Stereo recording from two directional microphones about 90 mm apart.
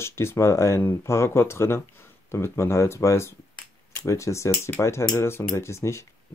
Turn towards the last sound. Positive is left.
turn(degrees=30)  # may be behind; listen again after turning